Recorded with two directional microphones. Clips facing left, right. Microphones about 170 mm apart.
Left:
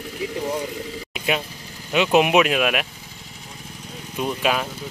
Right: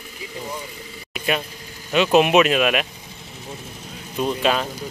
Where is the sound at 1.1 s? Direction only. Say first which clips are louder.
Right 1 dB; 15° left (ahead or behind).